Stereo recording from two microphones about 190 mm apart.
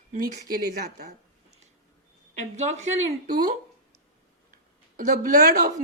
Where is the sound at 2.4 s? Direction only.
35° right (ahead or behind).